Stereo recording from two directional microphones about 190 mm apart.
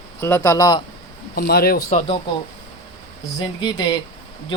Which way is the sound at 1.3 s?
55° left (ahead or behind).